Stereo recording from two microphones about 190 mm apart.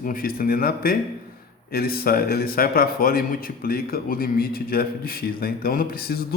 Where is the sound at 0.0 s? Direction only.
50° left (ahead or behind).